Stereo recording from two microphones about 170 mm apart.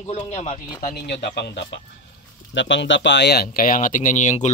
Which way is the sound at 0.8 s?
70° left (ahead or behind).